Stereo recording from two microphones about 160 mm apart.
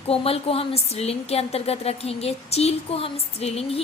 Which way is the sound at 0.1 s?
35° left (ahead or behind).